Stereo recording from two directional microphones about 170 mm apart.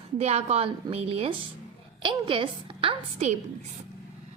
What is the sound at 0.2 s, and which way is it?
A woman's voice, 40° right (ahead or behind).